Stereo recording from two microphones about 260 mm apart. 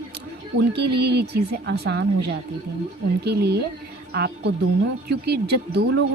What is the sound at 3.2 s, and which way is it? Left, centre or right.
A woman's voice, right.